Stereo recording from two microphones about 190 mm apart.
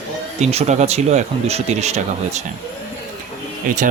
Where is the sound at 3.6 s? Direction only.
45° right (ahead or behind).